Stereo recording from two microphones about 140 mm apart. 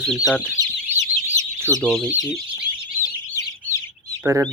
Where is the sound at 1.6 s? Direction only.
20° right (ahead or behind).